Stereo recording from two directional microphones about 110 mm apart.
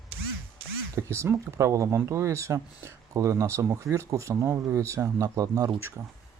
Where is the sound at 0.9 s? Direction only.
25° right (ahead or behind).